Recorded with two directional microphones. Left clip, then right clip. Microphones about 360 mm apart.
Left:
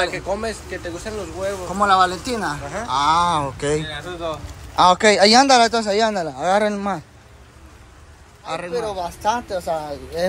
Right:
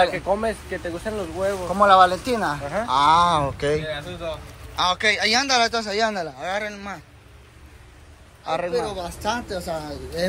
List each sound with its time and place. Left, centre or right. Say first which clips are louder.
0.1 s speech: right 1 dB; centre
1.7 s a man's voice: right 2 dB; centre
8.5 s speech: right 1 dB; centre